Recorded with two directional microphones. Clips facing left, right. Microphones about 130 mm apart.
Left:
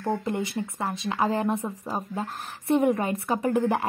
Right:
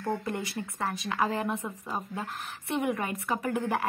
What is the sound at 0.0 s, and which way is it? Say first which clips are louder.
A woman's voice: left 4 dB; 20° left (ahead or behind).